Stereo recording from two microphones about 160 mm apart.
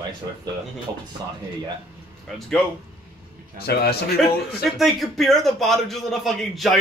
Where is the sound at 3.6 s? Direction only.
85° left.